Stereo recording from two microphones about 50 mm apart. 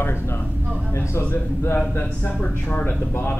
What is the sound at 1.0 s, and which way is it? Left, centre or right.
Speech, left.